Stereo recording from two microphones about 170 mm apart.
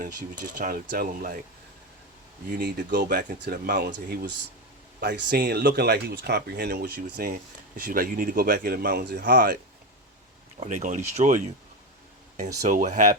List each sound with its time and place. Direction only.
0.0 s speech: 55° right (ahead or behind)
2.5 s speech: 70° right (ahead or behind)
4.9 s speech: 80° right; by 9.6 s 55° right (ahead or behind)
10.6 s speech: 45° right (ahead or behind)